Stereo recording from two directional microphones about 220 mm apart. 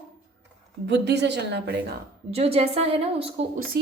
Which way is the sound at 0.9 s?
50° right (ahead or behind).